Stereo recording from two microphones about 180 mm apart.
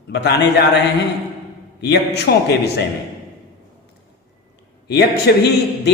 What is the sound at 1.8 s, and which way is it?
Speech, 70° left (ahead or behind).